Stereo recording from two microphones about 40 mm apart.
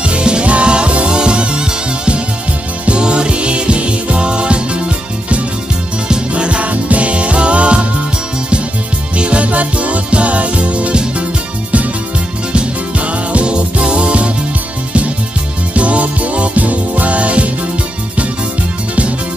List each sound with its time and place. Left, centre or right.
0.0 s music: right
9.1 s music: right
12.5 s music: right
15.7 s music: right